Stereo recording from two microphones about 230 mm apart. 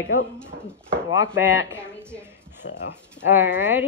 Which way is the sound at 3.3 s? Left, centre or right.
Centre.